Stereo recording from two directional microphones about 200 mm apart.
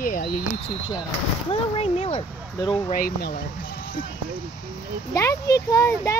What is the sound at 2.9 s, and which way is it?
Speech, 45° left (ahead or behind).